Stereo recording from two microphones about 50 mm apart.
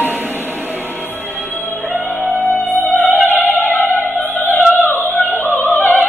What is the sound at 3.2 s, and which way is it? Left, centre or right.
Opera, left.